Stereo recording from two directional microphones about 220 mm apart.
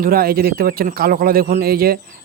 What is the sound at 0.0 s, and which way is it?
Speech, 40° right (ahead or behind).